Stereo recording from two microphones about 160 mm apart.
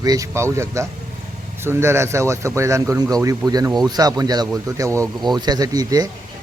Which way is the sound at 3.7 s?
Centre (ahead or behind).